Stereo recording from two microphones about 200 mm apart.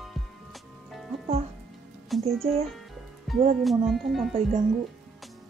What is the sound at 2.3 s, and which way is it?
Music, centre (ahead or behind).